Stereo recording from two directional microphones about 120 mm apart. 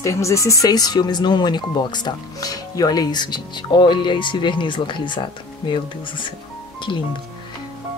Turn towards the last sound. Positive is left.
turn(degrees=40)  # may be behind; listen again after turning